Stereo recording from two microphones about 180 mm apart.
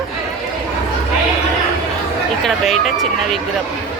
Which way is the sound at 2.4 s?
Centre (ahead or behind).